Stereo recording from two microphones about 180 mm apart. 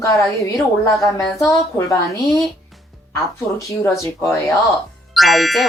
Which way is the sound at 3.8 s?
15° left (ahead or behind).